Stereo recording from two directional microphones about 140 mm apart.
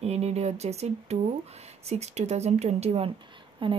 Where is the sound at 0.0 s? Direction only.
50° right (ahead or behind).